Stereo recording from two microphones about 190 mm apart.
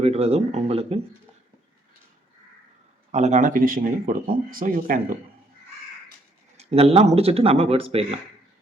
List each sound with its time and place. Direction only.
0.0 s speech: 30° right (ahead or behind)
3.1 s speech: 35° right (ahead or behind)
6.6 s speech: 35° right (ahead or behind)